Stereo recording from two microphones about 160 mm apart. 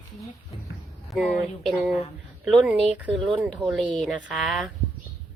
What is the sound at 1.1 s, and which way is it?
Speech, centre (ahead or behind).